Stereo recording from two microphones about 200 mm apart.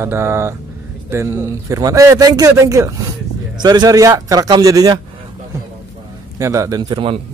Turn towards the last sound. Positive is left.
turn(degrees=-25)  # may be behind; listen again after turning